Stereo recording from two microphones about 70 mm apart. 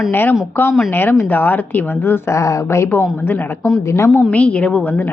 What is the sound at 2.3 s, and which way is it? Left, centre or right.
Speech, left.